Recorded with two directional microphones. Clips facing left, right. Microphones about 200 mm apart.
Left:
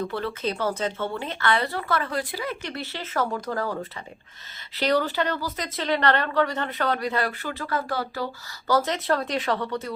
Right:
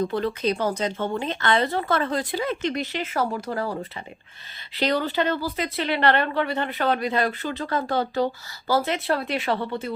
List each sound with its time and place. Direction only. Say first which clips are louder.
0.1 s speech: right 4 dB; 20° right (ahead or behind)